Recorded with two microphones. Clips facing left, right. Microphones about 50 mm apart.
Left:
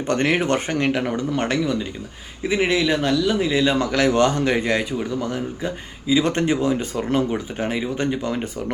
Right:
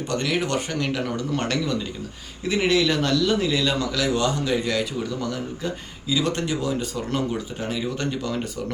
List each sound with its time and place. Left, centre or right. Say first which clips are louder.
0.1 s a man's voice: left 5 dB; left